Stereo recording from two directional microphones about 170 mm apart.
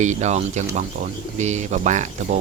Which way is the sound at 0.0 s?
45° right (ahead or behind).